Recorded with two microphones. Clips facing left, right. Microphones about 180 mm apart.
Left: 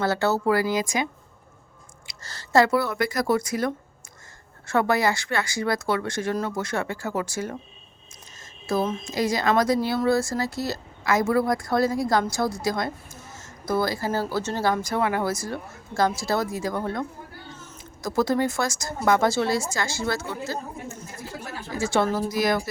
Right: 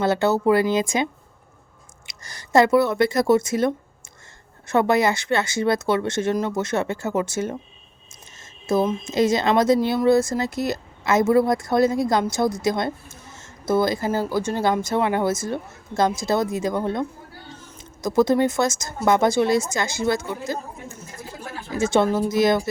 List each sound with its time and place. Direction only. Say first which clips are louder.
0.0 s a woman's voice: right 4 dB; 20° right (ahead or behind)
2.0 s a woman's voice: even; 15° right (ahead or behind)
8.6 s a woman's voice: right 4 dB; 20° right (ahead or behind)